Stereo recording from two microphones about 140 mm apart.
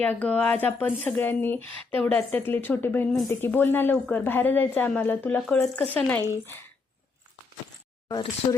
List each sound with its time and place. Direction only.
0.0 s a woman's voice: 10° left (ahead or behind)
1.7 s speech: 40° right (ahead or behind)
2.1 s a woman's voice: 15° left (ahead or behind)